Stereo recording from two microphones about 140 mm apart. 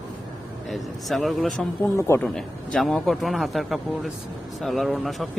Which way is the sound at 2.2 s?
5° left (ahead or behind).